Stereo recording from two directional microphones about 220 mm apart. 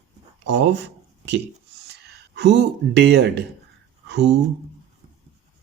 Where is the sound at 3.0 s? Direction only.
50° right (ahead or behind).